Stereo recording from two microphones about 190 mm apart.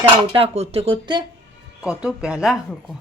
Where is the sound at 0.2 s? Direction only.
30° right (ahead or behind).